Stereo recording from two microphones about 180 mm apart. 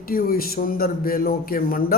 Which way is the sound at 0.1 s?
55° left (ahead or behind).